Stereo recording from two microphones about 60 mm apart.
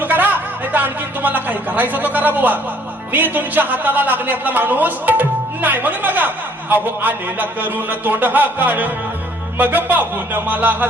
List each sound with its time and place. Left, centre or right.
0.0 s a man's voice: right